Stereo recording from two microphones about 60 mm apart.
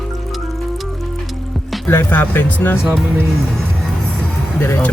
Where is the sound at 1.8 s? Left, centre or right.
Left.